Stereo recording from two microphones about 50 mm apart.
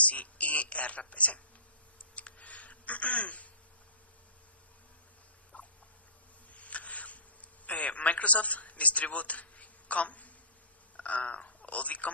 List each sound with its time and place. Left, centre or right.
0.0 s speech: left
2.1 s typing: left
5.5 s rodents: left
6.5 s a sound: left
7.7 s a man's voice: left